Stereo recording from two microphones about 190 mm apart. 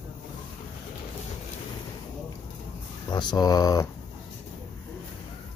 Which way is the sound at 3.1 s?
20° left (ahead or behind).